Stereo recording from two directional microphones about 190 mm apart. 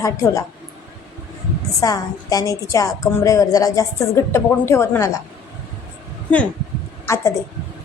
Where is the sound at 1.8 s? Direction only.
20° left (ahead or behind).